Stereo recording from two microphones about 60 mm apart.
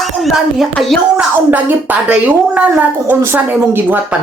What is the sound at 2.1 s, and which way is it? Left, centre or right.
Speech, right.